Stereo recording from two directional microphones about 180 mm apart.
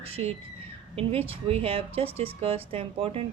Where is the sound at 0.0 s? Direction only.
35° right (ahead or behind).